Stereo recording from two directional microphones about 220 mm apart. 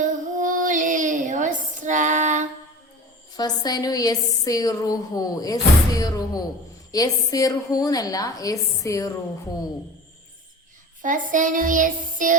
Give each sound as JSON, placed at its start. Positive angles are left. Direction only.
{"t": 0.0, "sound": "female singing", "side_deg": -35}
{"t": 3.3, "sound": "a woman's voice", "side_deg": 20}
{"t": 11.0, "sound": "child singing", "side_deg": -35}